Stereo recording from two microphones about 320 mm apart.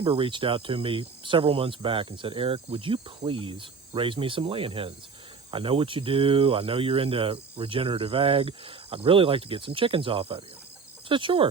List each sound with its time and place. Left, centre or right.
0.0 s speech: centre